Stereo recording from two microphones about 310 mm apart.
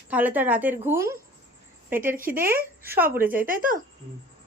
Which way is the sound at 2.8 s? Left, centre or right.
Centre.